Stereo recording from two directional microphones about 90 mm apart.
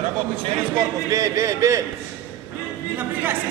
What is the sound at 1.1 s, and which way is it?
Speech, 35° right (ahead or behind).